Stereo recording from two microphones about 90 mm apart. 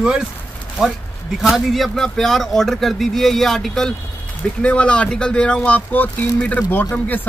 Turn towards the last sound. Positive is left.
turn(degrees=20)  # may be behind; listen again after turning